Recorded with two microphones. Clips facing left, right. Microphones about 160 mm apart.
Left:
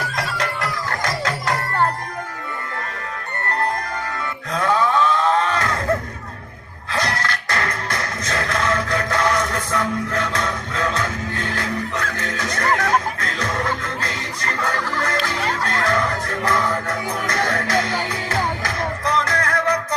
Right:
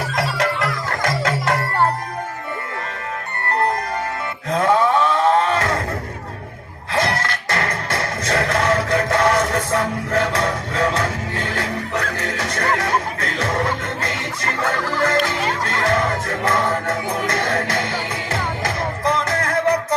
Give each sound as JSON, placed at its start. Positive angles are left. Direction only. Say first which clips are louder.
{"t": 0.0, "sound": "music", "louder": "right 4 dB", "side_deg": -30}
{"t": 4.5, "sound": "a sound", "louder": "right 3 dB", "side_deg": -30}
{"t": 6.9, "sound": "music", "louder": "right 3 dB", "side_deg": -30}